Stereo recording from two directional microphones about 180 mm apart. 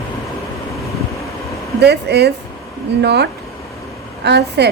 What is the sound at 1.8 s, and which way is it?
A woman's voice, 65° right (ahead or behind).